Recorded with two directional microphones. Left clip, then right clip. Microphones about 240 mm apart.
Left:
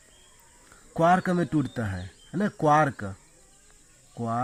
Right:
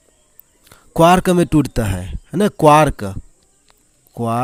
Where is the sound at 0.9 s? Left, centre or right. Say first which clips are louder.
Right 10 dB; right.